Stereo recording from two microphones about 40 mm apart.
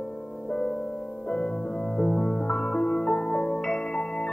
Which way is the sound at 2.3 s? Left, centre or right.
Left.